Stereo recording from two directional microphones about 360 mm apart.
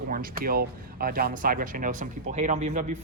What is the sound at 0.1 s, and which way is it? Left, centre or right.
Speech, right.